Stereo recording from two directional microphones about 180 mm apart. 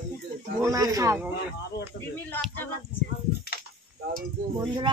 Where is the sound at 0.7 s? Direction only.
20° right (ahead or behind).